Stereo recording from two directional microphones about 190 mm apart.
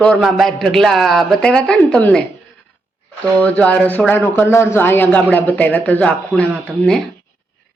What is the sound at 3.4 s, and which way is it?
A man's voice, 5° left (ahead or behind).